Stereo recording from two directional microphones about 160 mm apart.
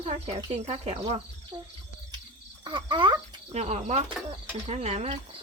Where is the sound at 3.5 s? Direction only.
45° right (ahead or behind).